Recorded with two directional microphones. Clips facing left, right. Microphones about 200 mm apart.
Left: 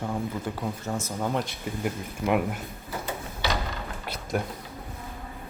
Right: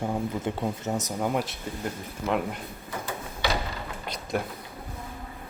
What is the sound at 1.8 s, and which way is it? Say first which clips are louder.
Speech: left 3 dB; 10° left (ahead or behind).